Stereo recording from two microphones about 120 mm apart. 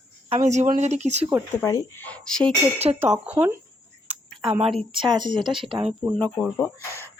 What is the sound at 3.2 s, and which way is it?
Speech, 15° right (ahead or behind).